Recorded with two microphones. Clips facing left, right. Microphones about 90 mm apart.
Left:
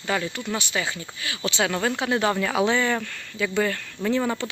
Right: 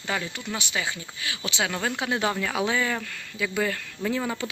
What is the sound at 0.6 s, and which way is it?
Speech, 15° right (ahead or behind).